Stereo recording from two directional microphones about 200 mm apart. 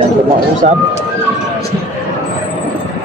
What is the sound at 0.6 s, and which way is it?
Speech, 35° right (ahead or behind).